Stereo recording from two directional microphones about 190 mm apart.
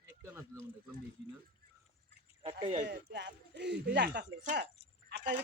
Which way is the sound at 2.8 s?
65° right (ahead or behind).